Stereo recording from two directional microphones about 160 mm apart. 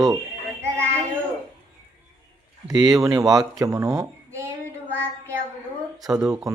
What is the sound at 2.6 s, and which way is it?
A child's voice, 25° right (ahead or behind).